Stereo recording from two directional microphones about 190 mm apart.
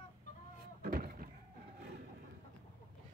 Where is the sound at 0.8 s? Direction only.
50° right (ahead or behind).